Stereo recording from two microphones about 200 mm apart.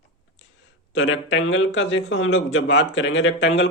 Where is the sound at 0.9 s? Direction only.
75° left (ahead or behind).